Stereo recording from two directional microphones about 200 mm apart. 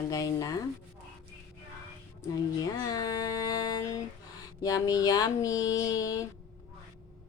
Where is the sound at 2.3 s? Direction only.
20° left (ahead or behind).